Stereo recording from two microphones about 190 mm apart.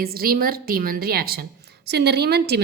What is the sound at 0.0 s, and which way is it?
A woman's voice, 50° right (ahead or behind).